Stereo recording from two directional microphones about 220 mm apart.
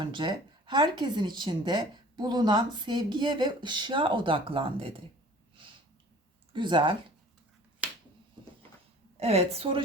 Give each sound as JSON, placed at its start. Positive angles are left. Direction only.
{"t": 0.0, "sound": "speech", "side_deg": -20}
{"t": 6.5, "sound": "speech", "side_deg": -20}
{"t": 7.8, "sound": "finger snapping", "side_deg": -5}
{"t": 9.1, "sound": "speech", "side_deg": -30}